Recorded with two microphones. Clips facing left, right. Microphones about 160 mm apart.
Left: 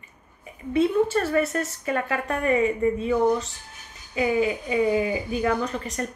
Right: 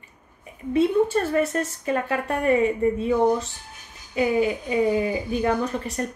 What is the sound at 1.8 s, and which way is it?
Speech, 35° right (ahead or behind).